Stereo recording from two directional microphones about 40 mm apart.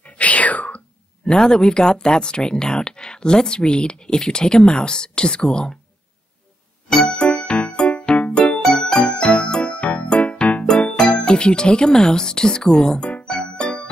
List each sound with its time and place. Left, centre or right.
0.0 s whispering: left
1.2 s speech: centre
6.9 s music: centre
11.0 s speech: left
13.2 s music: left